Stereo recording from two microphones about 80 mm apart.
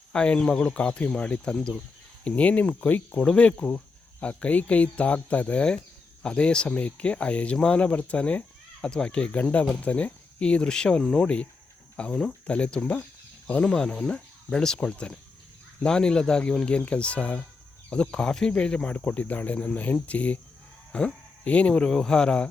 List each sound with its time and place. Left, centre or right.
0.1 s speech: centre